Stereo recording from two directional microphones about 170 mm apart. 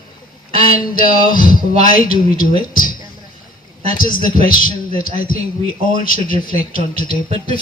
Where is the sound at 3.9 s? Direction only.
55° left (ahead or behind).